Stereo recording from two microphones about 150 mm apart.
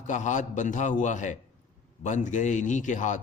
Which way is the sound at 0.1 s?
55° left (ahead or behind).